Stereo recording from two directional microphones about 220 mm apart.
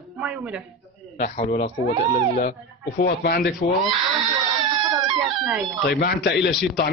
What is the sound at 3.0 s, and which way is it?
Speech, 45° left (ahead or behind).